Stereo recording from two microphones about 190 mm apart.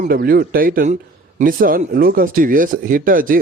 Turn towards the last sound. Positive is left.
turn(degrees=-45)  # may be behind; listen again after turning